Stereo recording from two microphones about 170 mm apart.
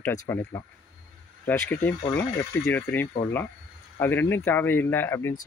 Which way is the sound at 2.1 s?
15° left (ahead or behind).